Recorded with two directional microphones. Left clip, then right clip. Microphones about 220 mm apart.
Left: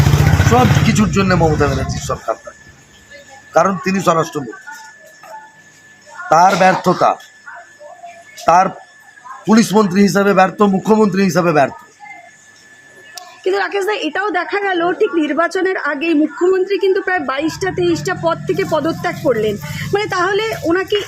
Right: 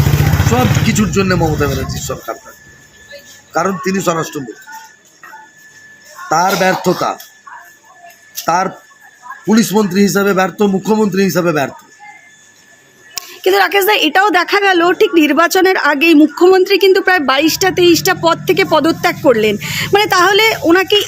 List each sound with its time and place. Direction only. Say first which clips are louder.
0.5 s a man's voice: left 2 dB; centre (ahead or behind)
3.5 s a man's voice: left 2 dB; centre (ahead or behind)
6.2 s a man's voice: left 2 dB; centre (ahead or behind)
8.4 s a man's voice: left 3 dB; 5° left (ahead or behind)
13.1 s a woman's voice: right 6 dB; 35° right (ahead or behind)